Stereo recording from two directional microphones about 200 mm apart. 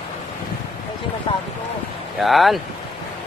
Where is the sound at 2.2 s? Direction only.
Centre (ahead or behind).